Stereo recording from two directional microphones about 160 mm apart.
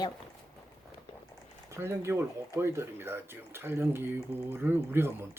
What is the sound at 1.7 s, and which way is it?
Speech, 15° right (ahead or behind).